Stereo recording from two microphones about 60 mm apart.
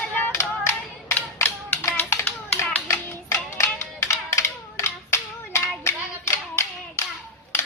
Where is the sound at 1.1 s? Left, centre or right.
Left.